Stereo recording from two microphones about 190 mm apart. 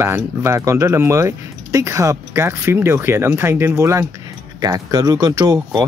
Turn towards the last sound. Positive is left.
turn(degrees=-20)  # may be behind; listen again after turning